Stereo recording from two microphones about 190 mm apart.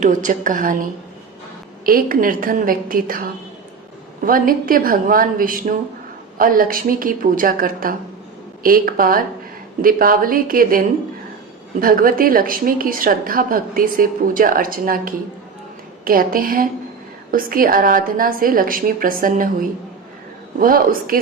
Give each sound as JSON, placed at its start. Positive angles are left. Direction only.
{"t": 0.0, "sound": "a woman's voice", "side_deg": -45}
{"t": 1.8, "sound": "a woman's voice", "side_deg": -50}
{"t": 4.3, "sound": "a woman's voice", "side_deg": -50}